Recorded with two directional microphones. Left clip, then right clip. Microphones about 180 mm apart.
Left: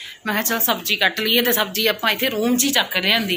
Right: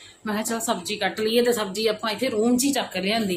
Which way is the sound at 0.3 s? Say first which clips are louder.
Left 5 dB; 10° right (ahead or behind).